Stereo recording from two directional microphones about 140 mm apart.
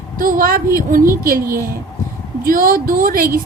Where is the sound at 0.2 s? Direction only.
85° right.